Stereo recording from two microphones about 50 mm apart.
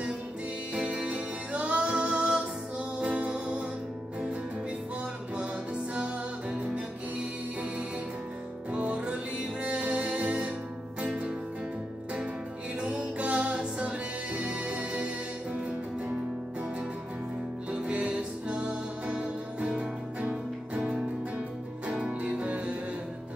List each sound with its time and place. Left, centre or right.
0.7 s music: right
5.4 s music: right
8.7 s music: right
12.8 s music: right
17.6 s music: right
21.8 s music: right